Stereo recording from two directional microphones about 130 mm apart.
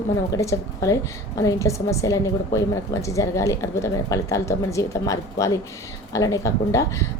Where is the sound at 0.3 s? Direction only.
25° left (ahead or behind).